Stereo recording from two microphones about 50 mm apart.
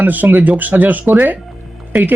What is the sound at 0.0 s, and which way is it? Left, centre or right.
Speech, right.